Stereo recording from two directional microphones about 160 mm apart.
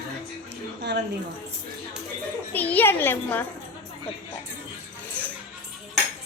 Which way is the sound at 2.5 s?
10° left (ahead or behind).